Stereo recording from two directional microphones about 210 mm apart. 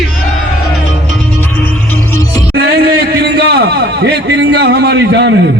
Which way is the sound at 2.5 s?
50° right (ahead or behind).